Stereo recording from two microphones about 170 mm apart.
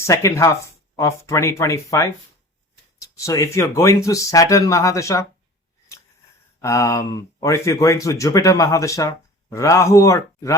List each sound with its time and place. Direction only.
0.0 s speech: 15° left (ahead or behind)
6.6 s speech: 20° left (ahead or behind)